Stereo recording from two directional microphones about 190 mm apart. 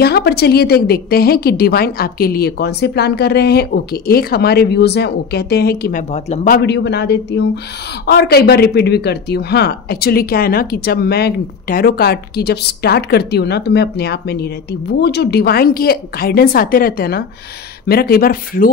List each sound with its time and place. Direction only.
0.0 s speech: 55° left (ahead or behind)
6.1 s speech: 35° left (ahead or behind)
6.6 s speech: 65° left (ahead or behind)